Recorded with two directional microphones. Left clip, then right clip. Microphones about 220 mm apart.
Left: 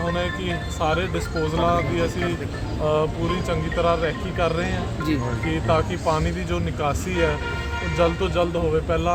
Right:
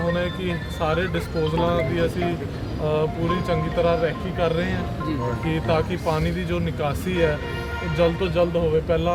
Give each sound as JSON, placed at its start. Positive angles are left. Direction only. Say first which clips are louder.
{"t": 0.1, "sound": "speech", "louder": "even", "side_deg": 5}